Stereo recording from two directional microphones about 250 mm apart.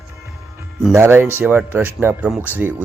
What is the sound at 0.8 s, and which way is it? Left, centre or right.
Speech, centre.